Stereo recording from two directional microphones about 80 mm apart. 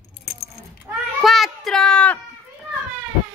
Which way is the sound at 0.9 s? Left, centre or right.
Centre.